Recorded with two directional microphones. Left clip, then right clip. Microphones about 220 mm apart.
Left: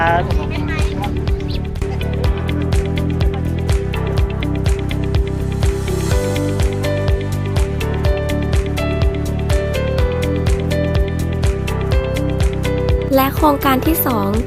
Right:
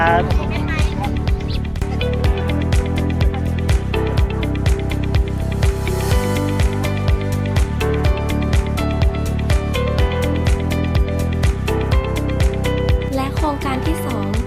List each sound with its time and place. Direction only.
0.0 s speech: centre (ahead or behind)
13.1 s music: 35° left (ahead or behind)